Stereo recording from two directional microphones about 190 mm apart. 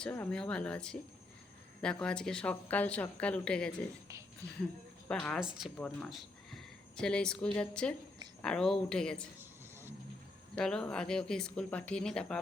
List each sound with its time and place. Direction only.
0.0 s speech: 10° left (ahead or behind)
5.0 s speech: 5° left (ahead or behind)
10.5 s speech: 5° left (ahead or behind)